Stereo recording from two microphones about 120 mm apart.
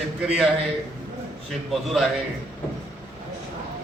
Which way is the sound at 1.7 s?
Centre (ahead or behind).